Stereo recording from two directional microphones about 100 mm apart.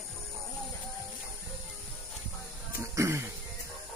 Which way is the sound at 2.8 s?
30° right (ahead or behind).